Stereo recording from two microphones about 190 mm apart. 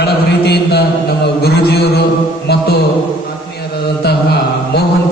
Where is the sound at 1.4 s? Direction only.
55° left (ahead or behind).